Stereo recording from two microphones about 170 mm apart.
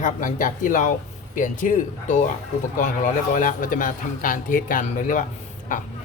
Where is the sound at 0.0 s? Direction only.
50° left (ahead or behind).